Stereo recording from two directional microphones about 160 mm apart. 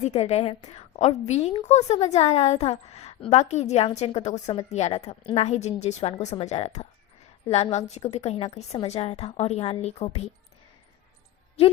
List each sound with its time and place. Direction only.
0.0 s a woman's voice: 40° left (ahead or behind)